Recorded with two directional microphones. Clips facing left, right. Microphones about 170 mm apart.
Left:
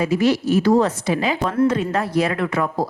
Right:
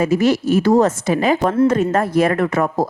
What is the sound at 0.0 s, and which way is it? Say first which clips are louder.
A woman's voice: right 2 dB; 45° right (ahead or behind).